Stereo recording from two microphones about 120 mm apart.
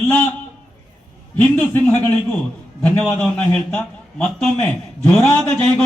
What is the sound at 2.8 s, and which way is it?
A man's voice, 15° left (ahead or behind).